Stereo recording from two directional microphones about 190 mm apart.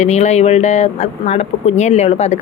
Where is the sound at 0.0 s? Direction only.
35° left (ahead or behind).